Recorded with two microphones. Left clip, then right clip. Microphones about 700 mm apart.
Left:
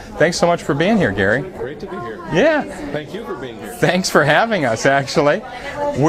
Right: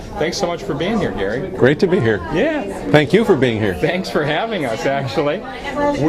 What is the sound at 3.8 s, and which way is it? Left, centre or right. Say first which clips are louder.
Speech: left 4 dB; left.